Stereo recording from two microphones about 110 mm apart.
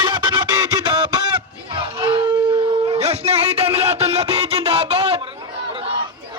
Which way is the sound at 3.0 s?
70° right (ahead or behind).